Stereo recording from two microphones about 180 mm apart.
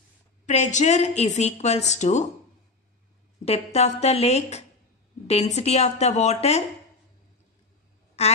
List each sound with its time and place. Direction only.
0.5 s a woman's voice: 40° left (ahead or behind)
3.4 s a woman's voice: 35° left (ahead or behind)
8.2 s a woman's voice: 35° left (ahead or behind)